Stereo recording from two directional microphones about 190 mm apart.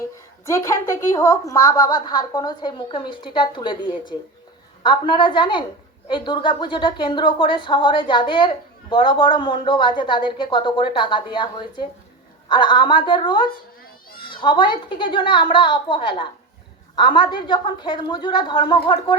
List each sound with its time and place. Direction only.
0.4 s a woman's voice: 15° left (ahead or behind)